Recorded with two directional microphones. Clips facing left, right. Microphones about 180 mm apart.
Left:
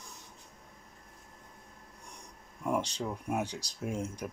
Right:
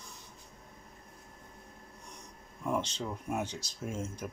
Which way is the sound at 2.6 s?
10° left (ahead or behind).